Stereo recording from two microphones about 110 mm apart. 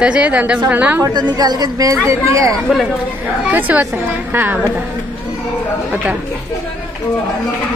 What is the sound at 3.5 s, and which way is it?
A woman's voice, 15° right (ahead or behind).